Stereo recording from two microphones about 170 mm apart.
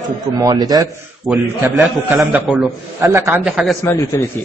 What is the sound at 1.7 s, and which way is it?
A man's voice, 5° right (ahead or behind).